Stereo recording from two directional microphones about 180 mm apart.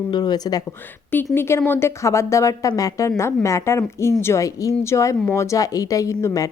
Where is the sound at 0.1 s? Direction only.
20° left (ahead or behind).